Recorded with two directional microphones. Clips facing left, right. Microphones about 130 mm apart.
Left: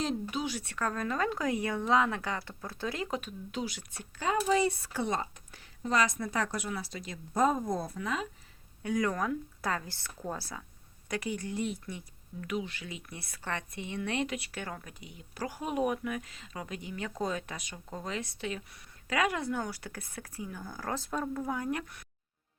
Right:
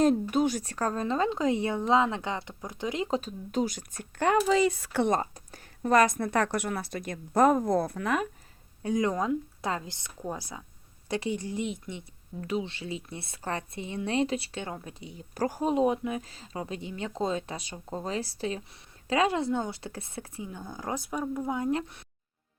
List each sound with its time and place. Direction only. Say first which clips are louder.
0.0 s speech: right 9 dB; 50° right (ahead or behind); by 3.2 s 20° right (ahead or behind)
3.2 s speech: right 7 dB; 40° right (ahead or behind); by 5.1 s 70° right (ahead or behind)
5.1 s whispering: right 6 dB; 40° right (ahead or behind)
5.8 s speech: right 7 dB; 55° right (ahead or behind)
8.8 s speech: right 3 dB; 25° right (ahead or behind); by 15.7 s 40° right (ahead or behind)
15.7 s speech: right 2 dB; 25° right (ahead or behind)